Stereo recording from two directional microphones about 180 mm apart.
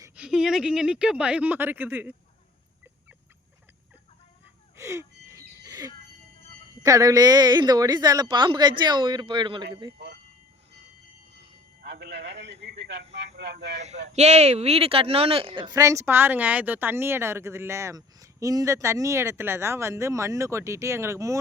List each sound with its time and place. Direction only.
0.2 s speech: 5° right (ahead or behind)
4.8 s a sound: 15° right (ahead or behind)
6.8 s a woman's voice: 20° right (ahead or behind)
11.8 s a man's voice: 70° right (ahead or behind)
13.7 s speech: 40° right (ahead or behind); by 21.3 s 15° right (ahead or behind)